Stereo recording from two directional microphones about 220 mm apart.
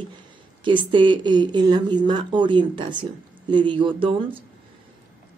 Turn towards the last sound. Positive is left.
turn(degrees=-25)  # may be behind; listen again after turning